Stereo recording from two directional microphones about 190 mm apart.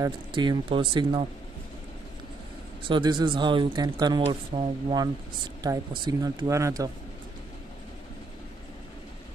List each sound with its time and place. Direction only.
0.0 s speech: 25° right (ahead or behind)
2.9 s speech: 25° right (ahead or behind)